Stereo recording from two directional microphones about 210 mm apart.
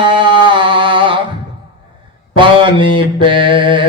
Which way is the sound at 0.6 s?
25° right (ahead or behind).